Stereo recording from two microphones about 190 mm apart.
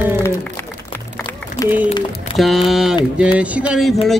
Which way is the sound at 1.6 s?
15° left (ahead or behind).